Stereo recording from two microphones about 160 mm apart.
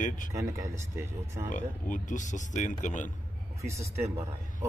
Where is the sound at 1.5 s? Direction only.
55° left (ahead or behind).